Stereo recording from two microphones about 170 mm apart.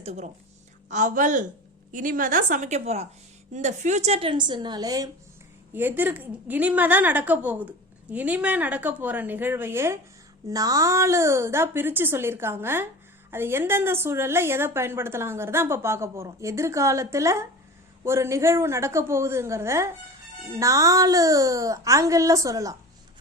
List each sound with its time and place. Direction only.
0.0 s a woman's voice: 40° right (ahead or behind); by 5.0 s 20° right (ahead or behind)
5.7 s a woman's voice: 10° right (ahead or behind)